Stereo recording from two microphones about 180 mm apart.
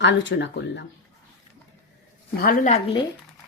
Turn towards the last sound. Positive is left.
turn(degrees=35)  # may be behind; listen again after turning